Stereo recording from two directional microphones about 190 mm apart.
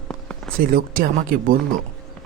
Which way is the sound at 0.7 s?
50° right (ahead or behind).